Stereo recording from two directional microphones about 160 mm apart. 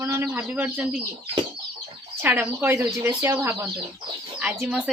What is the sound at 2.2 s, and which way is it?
Speech, 15° right (ahead or behind).